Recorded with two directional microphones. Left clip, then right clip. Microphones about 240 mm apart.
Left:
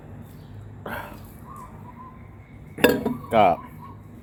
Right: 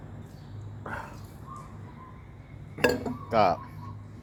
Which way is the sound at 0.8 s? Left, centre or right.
Centre.